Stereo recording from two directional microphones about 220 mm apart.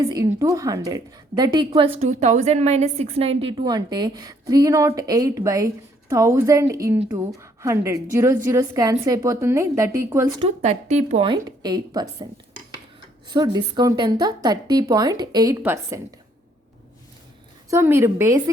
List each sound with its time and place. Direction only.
0.0 s a woman's voice: 15° right (ahead or behind)
2.0 s a woman's voice: 35° right (ahead or behind); by 10.2 s 15° right (ahead or behind)
10.6 s speech: 30° right (ahead or behind)
11.3 s a woman's voice: 20° right (ahead or behind)
17.7 s a woman's voice: 10° right (ahead or behind)